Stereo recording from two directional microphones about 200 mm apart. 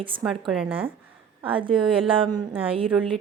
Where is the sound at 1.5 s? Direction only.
25° right (ahead or behind).